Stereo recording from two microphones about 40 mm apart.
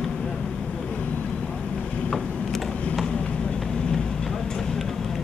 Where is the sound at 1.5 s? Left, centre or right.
Left.